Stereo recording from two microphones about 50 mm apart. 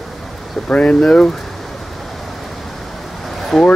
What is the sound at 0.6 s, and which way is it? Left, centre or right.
Speech, left.